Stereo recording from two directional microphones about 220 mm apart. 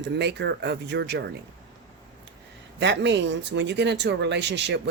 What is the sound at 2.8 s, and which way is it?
Speech, 55° right (ahead or behind).